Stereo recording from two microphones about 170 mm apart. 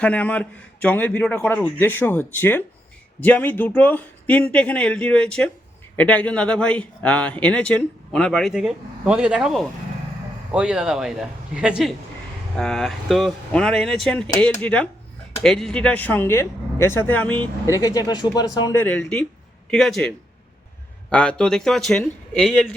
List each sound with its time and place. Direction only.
0.0 s a man's voice: 10° left (ahead or behind)
17.7 s speech: 20° left (ahead or behind)
18.8 s a man's voice: 10° left (ahead or behind)